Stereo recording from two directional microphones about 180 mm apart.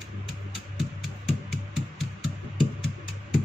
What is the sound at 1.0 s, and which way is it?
Music, centre (ahead or behind).